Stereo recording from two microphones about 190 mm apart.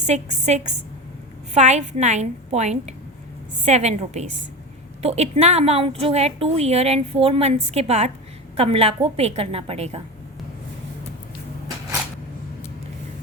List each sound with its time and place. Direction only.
0.0 s a woman's voice: 40° right (ahead or behind)